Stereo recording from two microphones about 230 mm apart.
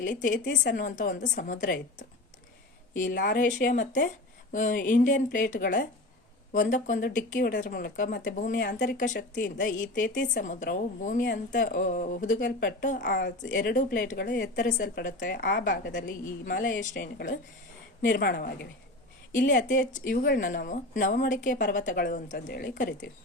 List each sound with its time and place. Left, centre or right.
0.0 s a woman's voice: left